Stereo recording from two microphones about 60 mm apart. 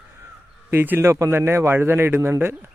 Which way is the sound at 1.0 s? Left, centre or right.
Right.